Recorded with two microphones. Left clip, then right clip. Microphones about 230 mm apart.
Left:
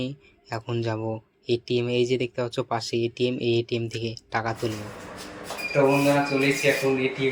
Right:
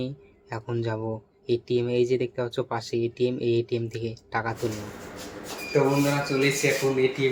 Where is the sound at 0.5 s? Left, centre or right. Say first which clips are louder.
Left 1 dB; left.